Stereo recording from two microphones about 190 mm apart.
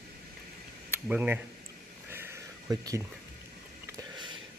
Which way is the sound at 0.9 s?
10° right (ahead or behind).